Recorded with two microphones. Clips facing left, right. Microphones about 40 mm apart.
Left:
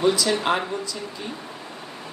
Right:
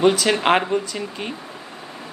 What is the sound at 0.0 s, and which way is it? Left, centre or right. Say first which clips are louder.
Speech: right 4 dB; right.